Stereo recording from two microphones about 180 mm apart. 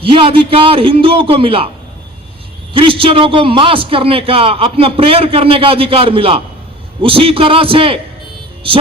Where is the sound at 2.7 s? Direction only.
30° right (ahead or behind).